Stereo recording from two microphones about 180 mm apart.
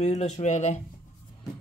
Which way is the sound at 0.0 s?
40° left (ahead or behind).